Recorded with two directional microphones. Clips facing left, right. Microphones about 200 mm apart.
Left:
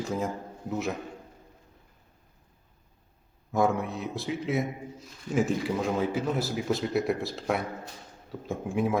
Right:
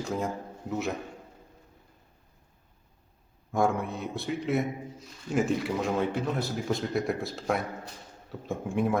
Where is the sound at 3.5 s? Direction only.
Centre (ahead or behind).